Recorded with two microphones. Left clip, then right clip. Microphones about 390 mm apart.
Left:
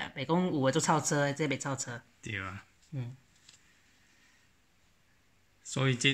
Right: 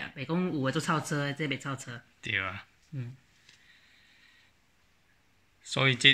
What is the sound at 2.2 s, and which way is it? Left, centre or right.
Speech, centre.